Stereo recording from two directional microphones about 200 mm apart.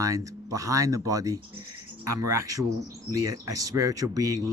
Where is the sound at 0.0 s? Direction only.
15° right (ahead or behind).